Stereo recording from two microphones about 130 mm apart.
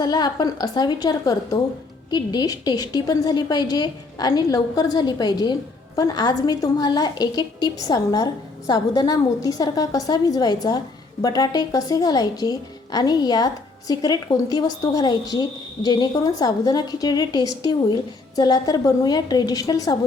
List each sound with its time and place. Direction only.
0.0 s a woman's voice: 30° left (ahead or behind)